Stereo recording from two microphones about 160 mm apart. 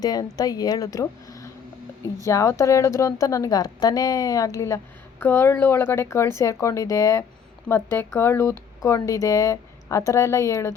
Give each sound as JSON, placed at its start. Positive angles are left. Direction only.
{"t": 0.0, "sound": "speech", "side_deg": 25}